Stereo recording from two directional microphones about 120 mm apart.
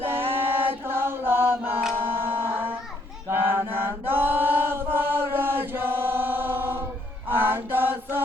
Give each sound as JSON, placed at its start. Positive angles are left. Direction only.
{"t": 0.0, "sound": "chant", "side_deg": -20}
{"t": 2.0, "sound": "music", "side_deg": -20}
{"t": 3.2, "sound": "chant", "side_deg": -20}
{"t": 7.3, "sound": "mantra", "side_deg": -20}